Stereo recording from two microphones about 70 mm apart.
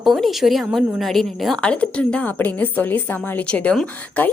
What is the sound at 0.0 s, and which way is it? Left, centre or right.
A woman's voice, centre.